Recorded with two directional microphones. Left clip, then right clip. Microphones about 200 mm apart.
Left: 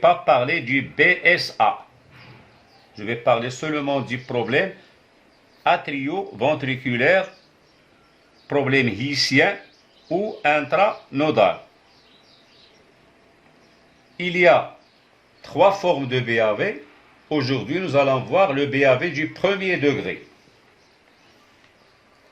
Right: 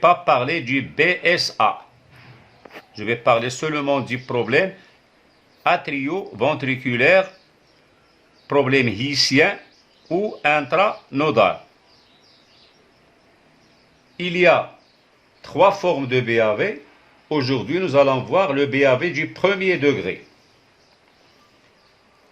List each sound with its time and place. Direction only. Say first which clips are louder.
0.0 s a man's voice: right 1 dB; 55° right (ahead or behind)
2.9 s a man's voice: right 2 dB; 50° right (ahead or behind)
5.6 s a man's voice: right 1 dB; 55° right (ahead or behind)
8.4 s a man's voice: right 2 dB; 55° right (ahead or behind)
14.2 s a man's voice: even; 55° right (ahead or behind)